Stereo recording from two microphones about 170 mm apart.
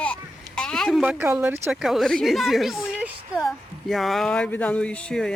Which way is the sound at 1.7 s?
Centre (ahead or behind).